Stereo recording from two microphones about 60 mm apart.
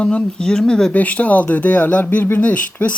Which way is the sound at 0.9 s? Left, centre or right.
Left.